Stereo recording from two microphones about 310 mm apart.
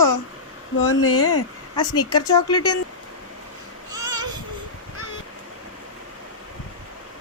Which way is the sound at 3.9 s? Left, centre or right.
Centre.